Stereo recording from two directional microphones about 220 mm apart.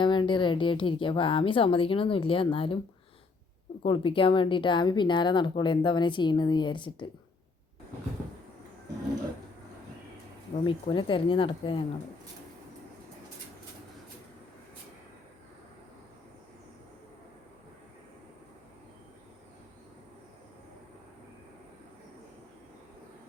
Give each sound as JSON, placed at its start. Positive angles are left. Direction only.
{"t": 0.0, "sound": "a woman's voice", "side_deg": 20}
{"t": 3.8, "sound": "a woman's voice", "side_deg": 25}
{"t": 10.5, "sound": "a woman's voice", "side_deg": 25}